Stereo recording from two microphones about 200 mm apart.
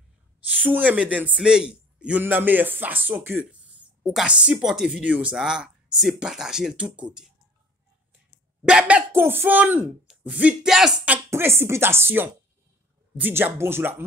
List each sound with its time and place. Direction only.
0.5 s a man's voice: 10° right (ahead or behind)
8.6 s speech: 5° right (ahead or behind)